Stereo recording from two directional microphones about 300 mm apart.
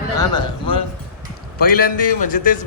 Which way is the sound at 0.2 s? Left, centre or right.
Centre.